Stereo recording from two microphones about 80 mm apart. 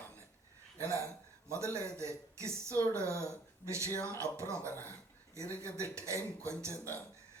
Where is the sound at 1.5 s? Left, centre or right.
Right.